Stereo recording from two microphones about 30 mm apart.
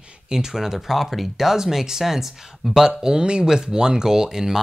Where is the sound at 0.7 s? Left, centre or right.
Centre.